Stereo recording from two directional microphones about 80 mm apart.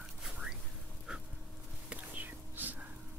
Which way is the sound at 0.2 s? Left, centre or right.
Centre.